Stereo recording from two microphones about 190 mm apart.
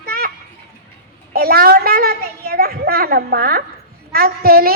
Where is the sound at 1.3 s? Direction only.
55° right (ahead or behind).